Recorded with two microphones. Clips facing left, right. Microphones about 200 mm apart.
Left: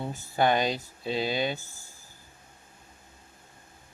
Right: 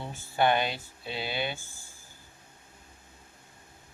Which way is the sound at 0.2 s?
40° left (ahead or behind).